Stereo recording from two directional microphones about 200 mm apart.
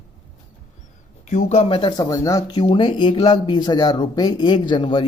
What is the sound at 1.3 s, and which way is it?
Speech, 35° left (ahead or behind).